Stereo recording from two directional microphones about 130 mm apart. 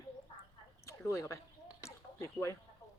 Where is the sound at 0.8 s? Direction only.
25° left (ahead or behind).